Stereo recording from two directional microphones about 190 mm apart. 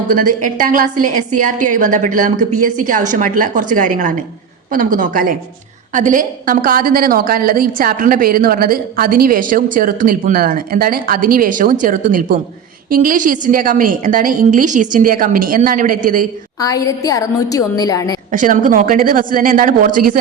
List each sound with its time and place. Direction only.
0.1 s a woman's voice: 45° right (ahead or behind)
16.6 s a woman's voice: 20° left (ahead or behind)
18.3 s a woman's voice: 45° right (ahead or behind)